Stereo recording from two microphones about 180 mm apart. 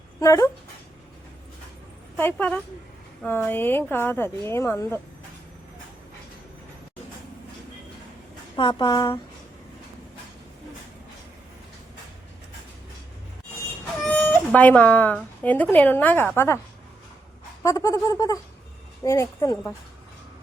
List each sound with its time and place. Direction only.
0.2 s speech: 20° left (ahead or behind)
2.1 s speech: 10° left (ahead or behind)
8.5 s speech: 25° left (ahead or behind)
14.0 s a sound: 5° left (ahead or behind)
15.4 s speech: 10° left (ahead or behind)
17.6 s speech: 15° left (ahead or behind)